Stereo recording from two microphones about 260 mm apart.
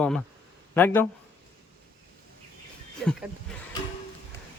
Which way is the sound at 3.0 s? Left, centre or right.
Centre.